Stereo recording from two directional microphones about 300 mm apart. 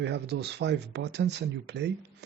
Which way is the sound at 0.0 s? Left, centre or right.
Right.